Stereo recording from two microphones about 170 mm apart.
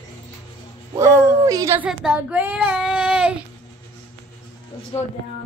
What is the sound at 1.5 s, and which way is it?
Speech, 20° right (ahead or behind).